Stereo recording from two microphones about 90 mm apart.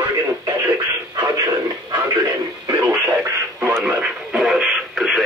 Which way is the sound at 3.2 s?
30° right (ahead or behind).